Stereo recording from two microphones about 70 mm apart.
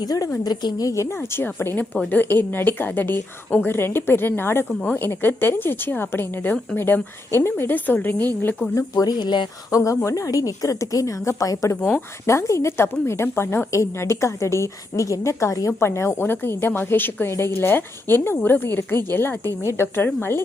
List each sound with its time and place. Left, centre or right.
0.4 s a woman's voice: left
1.4 s a woman's voice: left
8.7 s speech: left
9.7 s a woman's voice: left
11.9 s a woman's voice: left